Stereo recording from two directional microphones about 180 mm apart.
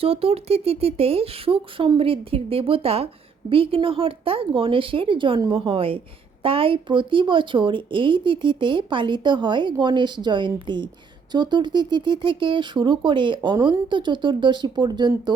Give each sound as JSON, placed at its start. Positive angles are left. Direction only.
{"t": 0.0, "sound": "speech", "side_deg": -30}